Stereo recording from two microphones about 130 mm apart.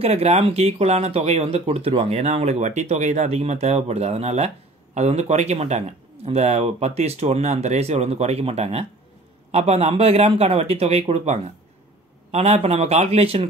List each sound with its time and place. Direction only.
0.0 s a man's voice: 50° right (ahead or behind)